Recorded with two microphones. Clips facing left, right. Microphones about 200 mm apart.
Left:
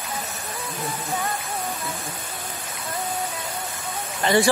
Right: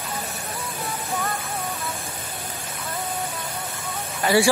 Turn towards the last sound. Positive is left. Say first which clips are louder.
# even
turn(degrees=-5)  # may be behind; listen again after turning